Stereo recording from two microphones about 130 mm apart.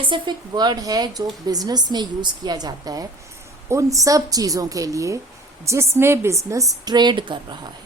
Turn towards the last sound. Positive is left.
turn(degrees=-35)  # may be behind; listen again after turning